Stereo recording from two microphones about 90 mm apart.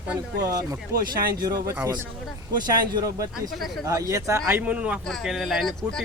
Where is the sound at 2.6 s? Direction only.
50° right (ahead or behind); by 4.6 s 30° right (ahead or behind).